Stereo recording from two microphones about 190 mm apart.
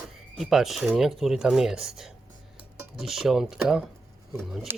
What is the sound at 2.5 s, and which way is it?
Dishes, centre (ahead or behind).